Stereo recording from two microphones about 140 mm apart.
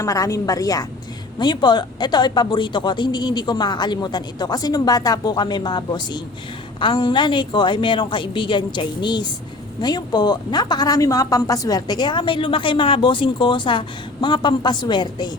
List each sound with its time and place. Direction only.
0.0 s a woman's voice: 25° left (ahead or behind)